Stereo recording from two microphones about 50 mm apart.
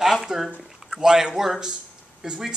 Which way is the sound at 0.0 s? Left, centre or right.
Centre.